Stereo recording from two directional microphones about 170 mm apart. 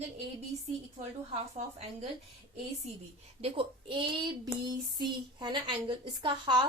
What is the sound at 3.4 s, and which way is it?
Speech, 30° right (ahead or behind).